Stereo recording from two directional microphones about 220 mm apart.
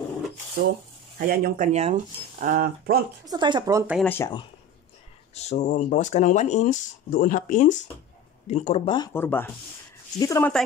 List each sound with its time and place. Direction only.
0.6 s speech: 40° right (ahead or behind)
3.3 s speech: 20° right (ahead or behind)
3.9 s speech: 5° left (ahead or behind)
5.3 s speech: 30° left (ahead or behind); by 10.5 s 15° left (ahead or behind)